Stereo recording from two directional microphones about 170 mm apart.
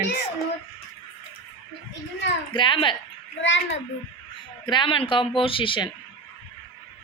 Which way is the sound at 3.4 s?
90° left.